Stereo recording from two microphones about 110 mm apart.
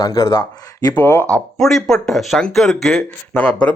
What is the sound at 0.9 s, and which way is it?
Speech, 20° left (ahead or behind).